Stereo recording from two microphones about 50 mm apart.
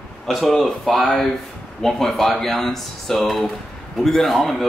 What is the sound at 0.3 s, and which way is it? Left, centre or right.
A man's voice, centre.